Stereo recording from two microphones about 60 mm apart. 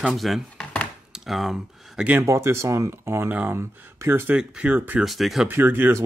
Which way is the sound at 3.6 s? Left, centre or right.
Right.